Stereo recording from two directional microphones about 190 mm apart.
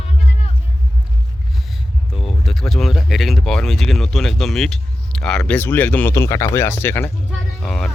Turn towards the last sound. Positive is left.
turn(degrees=5)  # may be behind; listen again after turning